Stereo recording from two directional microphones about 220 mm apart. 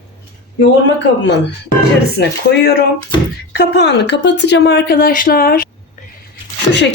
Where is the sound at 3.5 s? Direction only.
50° left (ahead or behind).